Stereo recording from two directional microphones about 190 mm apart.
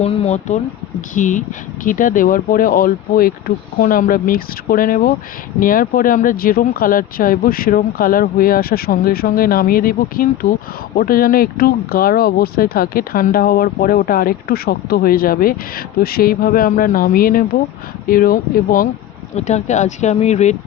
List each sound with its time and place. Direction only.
0.0 s speech: 30° left (ahead or behind); by 18.9 s 50° left (ahead or behind)
19.4 s speech: 35° left (ahead or behind)